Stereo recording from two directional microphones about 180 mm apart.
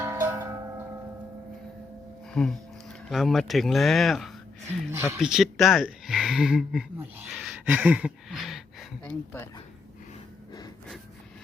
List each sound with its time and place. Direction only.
0.0 s tubular bells: 15° right (ahead or behind)
2.3 s speech: 5° left (ahead or behind)
7.3 s a sound: centre (ahead or behind)